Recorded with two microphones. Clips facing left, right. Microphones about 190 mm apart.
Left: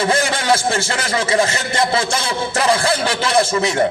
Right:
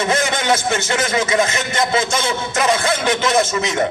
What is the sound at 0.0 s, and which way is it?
Speech, 30° left (ahead or behind).